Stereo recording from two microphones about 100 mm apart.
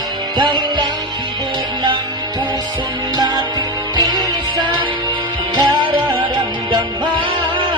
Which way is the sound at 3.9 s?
40° right (ahead or behind).